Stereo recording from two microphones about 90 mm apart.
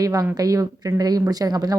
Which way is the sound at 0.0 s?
40° right (ahead or behind).